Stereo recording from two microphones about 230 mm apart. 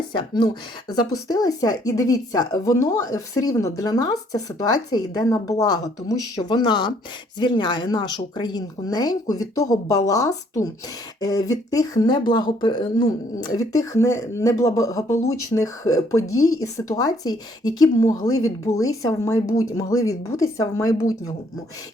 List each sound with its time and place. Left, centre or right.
0.1 s speech: left